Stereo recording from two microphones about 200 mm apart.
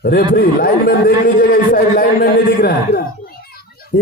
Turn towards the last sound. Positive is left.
turn(degrees=50)  # may be behind; listen again after turning